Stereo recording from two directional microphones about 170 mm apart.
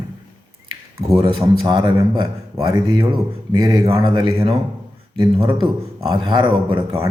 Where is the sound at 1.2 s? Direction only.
25° right (ahead or behind).